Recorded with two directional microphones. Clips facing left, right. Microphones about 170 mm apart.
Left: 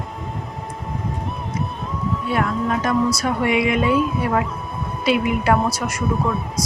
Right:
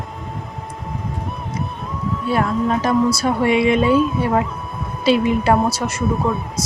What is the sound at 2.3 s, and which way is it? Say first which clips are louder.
Speech: right 3 dB; 30° right (ahead or behind).